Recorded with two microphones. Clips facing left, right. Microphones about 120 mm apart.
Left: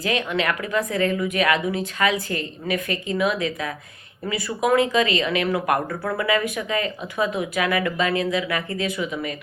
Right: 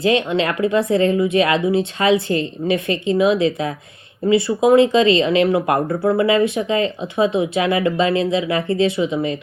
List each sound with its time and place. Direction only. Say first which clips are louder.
0.0 s speech: right 6 dB; 30° right (ahead or behind)